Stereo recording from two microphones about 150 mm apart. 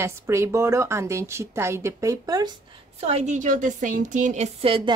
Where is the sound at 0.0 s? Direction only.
20° right (ahead or behind).